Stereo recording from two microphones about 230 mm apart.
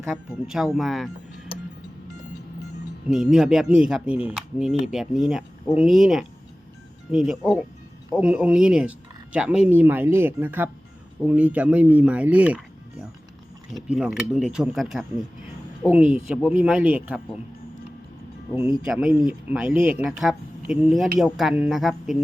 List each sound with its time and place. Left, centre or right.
0.0 s speech: centre
3.1 s speech: centre
13.7 s speech: centre
16.5 s speech: centre
18.9 s speech: centre